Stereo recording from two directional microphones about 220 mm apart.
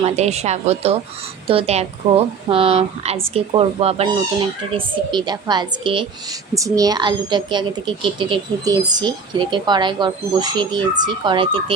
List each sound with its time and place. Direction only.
0.0 s a woman's voice: 30° right (ahead or behind)